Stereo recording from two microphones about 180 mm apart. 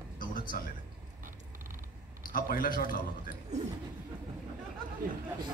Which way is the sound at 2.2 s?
50° left (ahead or behind).